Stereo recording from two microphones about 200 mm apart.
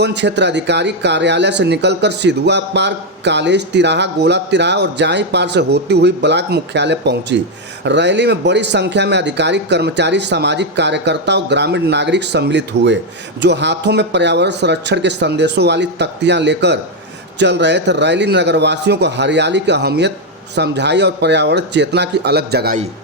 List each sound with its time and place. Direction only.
0.0 s speech: 60° right (ahead or behind)